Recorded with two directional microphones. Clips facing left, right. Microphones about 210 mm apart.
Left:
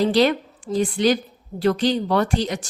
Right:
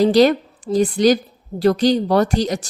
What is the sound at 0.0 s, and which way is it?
A woman's voice, 40° right (ahead or behind).